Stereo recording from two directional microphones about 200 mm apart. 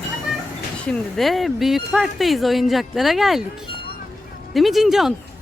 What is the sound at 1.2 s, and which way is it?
Speech, centre (ahead or behind).